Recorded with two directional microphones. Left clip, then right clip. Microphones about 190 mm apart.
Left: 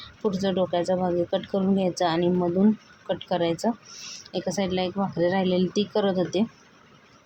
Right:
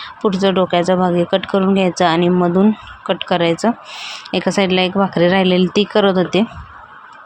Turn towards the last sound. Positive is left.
turn(degrees=-15)  # may be behind; listen again after turning